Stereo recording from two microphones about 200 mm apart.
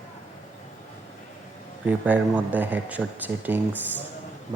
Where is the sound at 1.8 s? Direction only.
10° right (ahead or behind).